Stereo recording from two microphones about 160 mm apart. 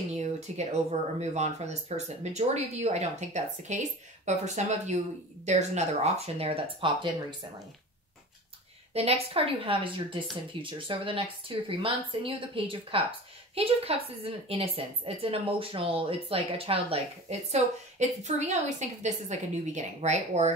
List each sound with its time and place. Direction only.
0.1 s a woman's voice: 45° right (ahead or behind)
8.9 s a woman's voice: 40° right (ahead or behind)